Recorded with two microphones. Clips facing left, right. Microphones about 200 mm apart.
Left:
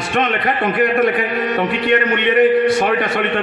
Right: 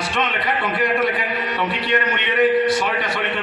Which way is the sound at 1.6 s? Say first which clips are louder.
Left 5 dB; 50° left (ahead or behind).